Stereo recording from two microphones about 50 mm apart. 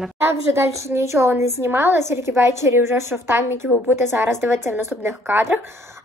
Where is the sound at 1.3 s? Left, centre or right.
Right.